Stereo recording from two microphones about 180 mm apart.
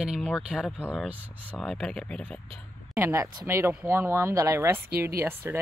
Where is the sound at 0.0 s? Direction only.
Centre (ahead or behind).